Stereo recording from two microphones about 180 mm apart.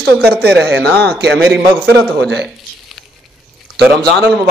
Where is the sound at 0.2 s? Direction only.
65° right (ahead or behind).